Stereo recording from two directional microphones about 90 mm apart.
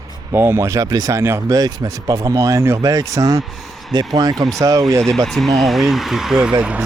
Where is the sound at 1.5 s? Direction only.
45° right (ahead or behind).